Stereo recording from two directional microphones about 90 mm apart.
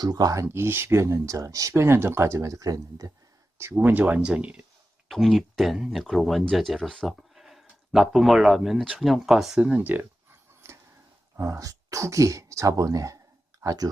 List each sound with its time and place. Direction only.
0.0 s speech: 45° right (ahead or behind)
0.4 s speech: 30° right (ahead or behind)
3.8 s speech: 20° right (ahead or behind)
5.0 s speech: centre (ahead or behind); by 10.1 s 20° right (ahead or behind)
10.6 s a sound: 30° right (ahead or behind)
11.3 s speech: 35° right (ahead or behind)